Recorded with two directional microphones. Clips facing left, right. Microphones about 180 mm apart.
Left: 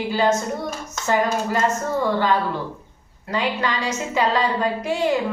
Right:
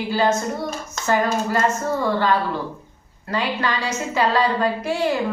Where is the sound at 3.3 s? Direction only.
15° left (ahead or behind).